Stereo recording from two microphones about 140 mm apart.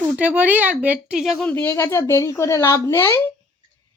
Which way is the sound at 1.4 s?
15° left (ahead or behind).